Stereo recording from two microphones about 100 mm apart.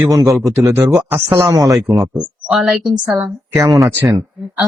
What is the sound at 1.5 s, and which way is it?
Speech, 40° right (ahead or behind).